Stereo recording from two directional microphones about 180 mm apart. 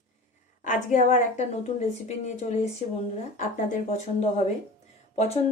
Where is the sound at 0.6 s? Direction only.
45° left (ahead or behind).